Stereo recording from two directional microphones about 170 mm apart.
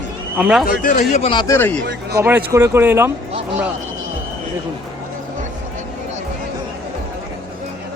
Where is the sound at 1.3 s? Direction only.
15° left (ahead or behind).